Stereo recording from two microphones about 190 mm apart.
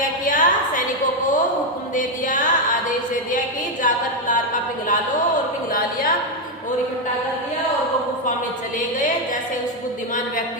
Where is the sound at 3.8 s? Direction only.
45° left (ahead or behind).